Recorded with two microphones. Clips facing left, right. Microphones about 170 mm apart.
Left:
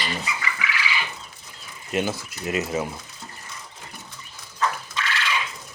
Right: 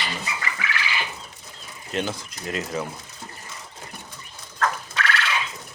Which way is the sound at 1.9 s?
10° left (ahead or behind).